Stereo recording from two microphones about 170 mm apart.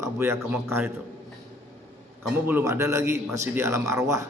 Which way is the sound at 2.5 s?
15° right (ahead or behind).